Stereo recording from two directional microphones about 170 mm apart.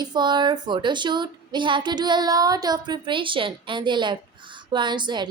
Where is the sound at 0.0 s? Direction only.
25° right (ahead or behind).